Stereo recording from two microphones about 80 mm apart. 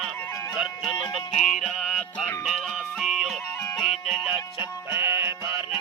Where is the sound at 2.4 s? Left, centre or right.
Centre.